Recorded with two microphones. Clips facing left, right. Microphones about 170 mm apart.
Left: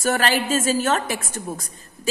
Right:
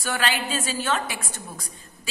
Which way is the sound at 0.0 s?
45° left (ahead or behind).